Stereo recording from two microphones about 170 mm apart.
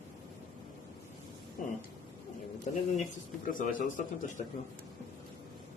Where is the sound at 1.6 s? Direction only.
50° left (ahead or behind).